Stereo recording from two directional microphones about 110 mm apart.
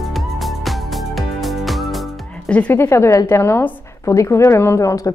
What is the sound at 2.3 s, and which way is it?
A woman's voice, 10° left (ahead or behind).